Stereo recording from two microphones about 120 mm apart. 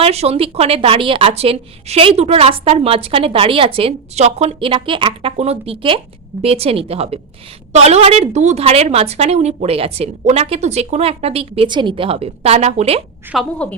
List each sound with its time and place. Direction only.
0.0 s a woman's voice: 60° right (ahead or behind)
13.3 s a woman's voice: centre (ahead or behind)